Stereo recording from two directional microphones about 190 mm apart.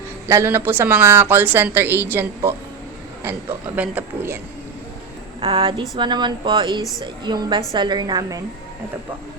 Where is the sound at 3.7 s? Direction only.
10° right (ahead or behind).